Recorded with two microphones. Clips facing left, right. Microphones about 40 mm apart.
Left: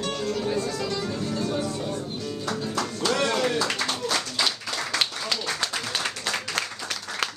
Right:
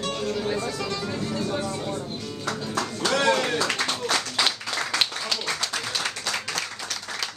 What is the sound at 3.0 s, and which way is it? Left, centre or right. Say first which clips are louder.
Music: right 3 dB; right.